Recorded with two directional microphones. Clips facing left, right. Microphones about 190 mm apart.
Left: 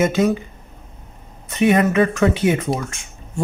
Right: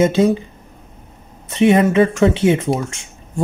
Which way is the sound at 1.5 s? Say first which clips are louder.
Right 3 dB; 25° right (ahead or behind).